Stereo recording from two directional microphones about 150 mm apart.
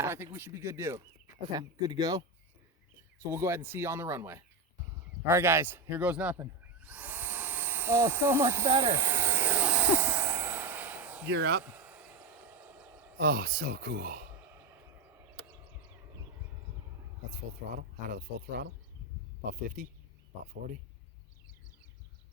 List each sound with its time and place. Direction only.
0.0 s a sound: 15° right (ahead or behind)
0.3 s speech: 15° right (ahead or behind)
3.2 s speech: 15° right (ahead or behind)
8.8 s vehicle: 15° right (ahead or behind)
11.3 s speech: 90° right
11.6 s a sound: 10° right (ahead or behind)
13.1 s speech: 75° right (ahead or behind)
17.7 s speech: 70° right (ahead or behind)